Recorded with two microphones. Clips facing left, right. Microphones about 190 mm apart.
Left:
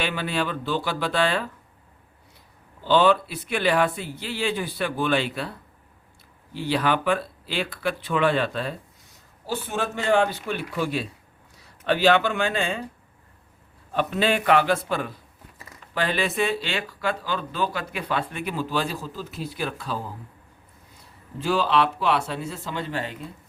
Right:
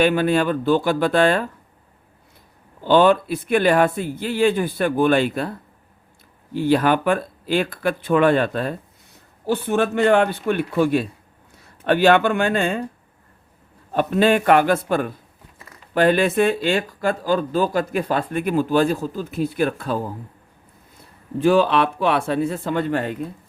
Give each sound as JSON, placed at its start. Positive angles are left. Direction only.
{"t": 0.0, "sound": "speech", "side_deg": -50}
{"t": 2.8, "sound": "speech", "side_deg": -50}
{"t": 13.9, "sound": "speech", "side_deg": -45}
{"t": 21.3, "sound": "speech", "side_deg": -55}